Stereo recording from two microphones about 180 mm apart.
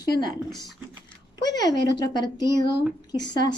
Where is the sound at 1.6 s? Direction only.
25° left (ahead or behind).